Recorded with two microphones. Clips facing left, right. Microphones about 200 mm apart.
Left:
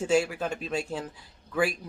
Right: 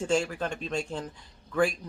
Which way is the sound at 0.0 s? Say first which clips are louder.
Left 2 dB; 5° left (ahead or behind).